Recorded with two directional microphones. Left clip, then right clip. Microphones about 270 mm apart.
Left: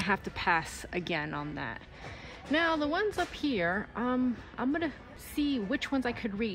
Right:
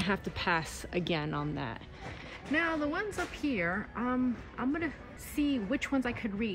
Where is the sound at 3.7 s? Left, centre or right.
Left.